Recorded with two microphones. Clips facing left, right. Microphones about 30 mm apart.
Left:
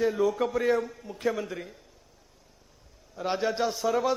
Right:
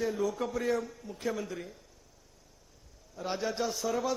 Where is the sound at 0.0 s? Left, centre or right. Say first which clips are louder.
Left 6 dB; left.